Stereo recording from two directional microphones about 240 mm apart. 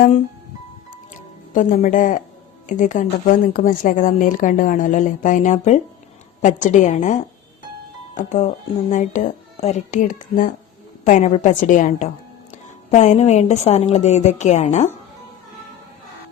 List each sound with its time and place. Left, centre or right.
0.9 s music: left
2.6 s a woman's voice: left